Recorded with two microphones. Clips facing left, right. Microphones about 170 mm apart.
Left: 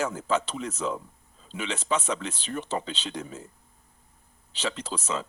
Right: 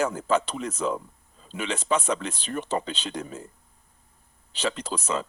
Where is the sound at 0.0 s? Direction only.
55° right (ahead or behind).